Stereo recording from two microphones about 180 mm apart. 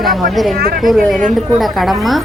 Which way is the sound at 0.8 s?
Centre (ahead or behind).